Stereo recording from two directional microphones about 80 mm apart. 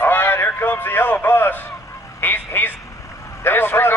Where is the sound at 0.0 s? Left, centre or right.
Left.